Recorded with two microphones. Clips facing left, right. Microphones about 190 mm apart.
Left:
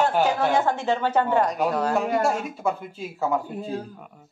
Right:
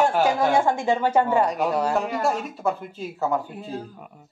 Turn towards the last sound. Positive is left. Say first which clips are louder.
# even
turn(degrees=0)  # may be behind; listen again after turning